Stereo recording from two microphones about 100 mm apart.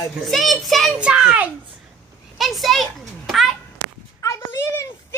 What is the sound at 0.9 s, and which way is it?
A child's voice, 10° right (ahead or behind).